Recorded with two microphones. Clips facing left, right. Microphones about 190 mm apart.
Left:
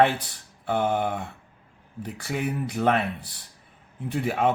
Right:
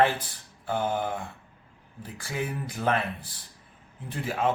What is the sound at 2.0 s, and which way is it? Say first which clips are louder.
Speech: left 4 dB; 70° left (ahead or behind).